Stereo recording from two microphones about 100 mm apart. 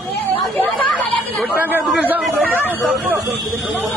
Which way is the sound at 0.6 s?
15° left (ahead or behind).